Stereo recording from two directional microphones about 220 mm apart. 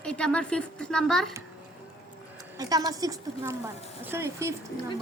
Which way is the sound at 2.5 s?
15° right (ahead or behind).